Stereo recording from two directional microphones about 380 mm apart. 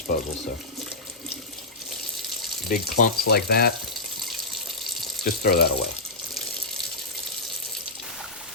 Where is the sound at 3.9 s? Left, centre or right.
Centre.